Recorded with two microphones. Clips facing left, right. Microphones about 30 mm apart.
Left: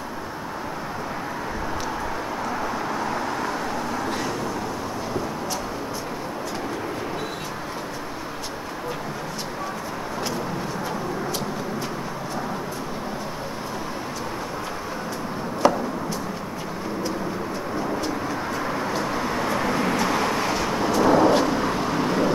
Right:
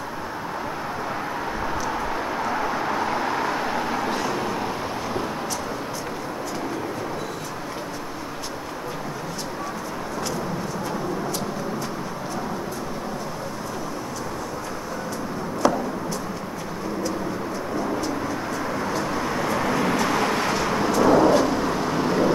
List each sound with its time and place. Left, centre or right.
2.4 s vehicle: centre
4.1 s vehicle: centre
15.6 s a sound: centre
18.7 s vehicle: centre
20.9 s thunder: centre
21.5 s vehicle: centre